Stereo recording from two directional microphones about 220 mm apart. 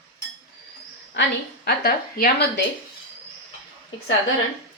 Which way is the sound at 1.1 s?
55° left (ahead or behind).